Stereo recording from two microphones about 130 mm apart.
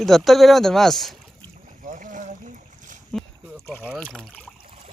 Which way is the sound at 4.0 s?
5° left (ahead or behind).